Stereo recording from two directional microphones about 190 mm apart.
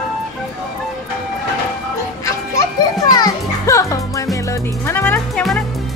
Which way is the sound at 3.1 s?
20° left (ahead or behind).